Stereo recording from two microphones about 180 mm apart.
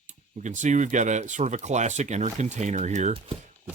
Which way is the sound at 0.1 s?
45° right (ahead or behind).